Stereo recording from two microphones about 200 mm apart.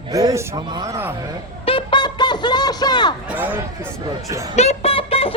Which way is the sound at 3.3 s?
10° right (ahead or behind).